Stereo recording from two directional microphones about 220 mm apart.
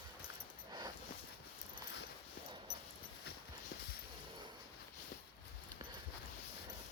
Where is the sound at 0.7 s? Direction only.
20° right (ahead or behind).